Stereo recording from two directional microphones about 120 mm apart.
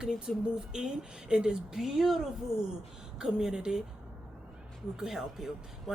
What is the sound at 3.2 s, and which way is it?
Speech, 5° right (ahead or behind).